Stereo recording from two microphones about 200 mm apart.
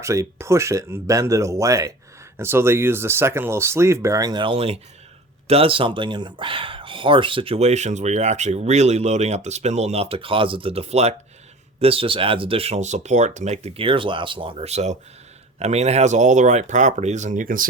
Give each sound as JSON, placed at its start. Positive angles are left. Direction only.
{"t": 0.0, "sound": "speech", "side_deg": -15}